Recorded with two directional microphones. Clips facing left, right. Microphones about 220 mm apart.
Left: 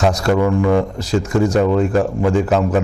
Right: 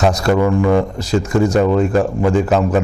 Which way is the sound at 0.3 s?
25° right (ahead or behind).